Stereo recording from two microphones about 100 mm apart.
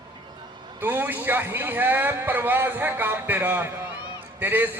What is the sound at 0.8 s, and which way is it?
Speech, 20° right (ahead or behind).